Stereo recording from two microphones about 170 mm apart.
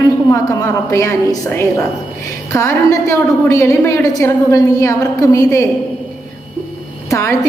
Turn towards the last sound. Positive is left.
turn(degrees=15)  # may be behind; listen again after turning